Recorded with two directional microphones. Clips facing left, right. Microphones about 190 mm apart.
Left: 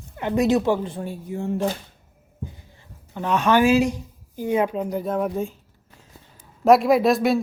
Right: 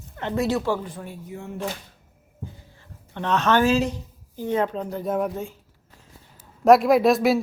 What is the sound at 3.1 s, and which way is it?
A woman's voice, 10° left (ahead or behind).